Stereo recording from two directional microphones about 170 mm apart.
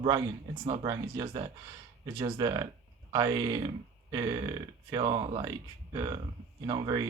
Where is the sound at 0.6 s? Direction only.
30° right (ahead or behind).